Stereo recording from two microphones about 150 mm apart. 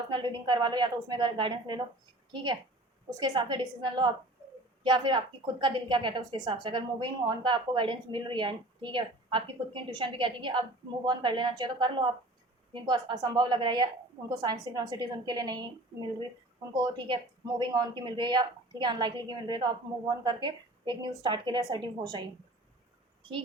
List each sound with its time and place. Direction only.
0.1 s a woman's voice: 30° right (ahead or behind)